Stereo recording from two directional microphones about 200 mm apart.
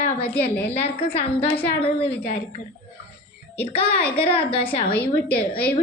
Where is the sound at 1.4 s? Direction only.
25° left (ahead or behind).